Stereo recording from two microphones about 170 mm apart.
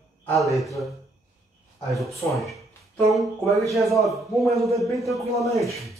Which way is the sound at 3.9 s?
Centre (ahead or behind).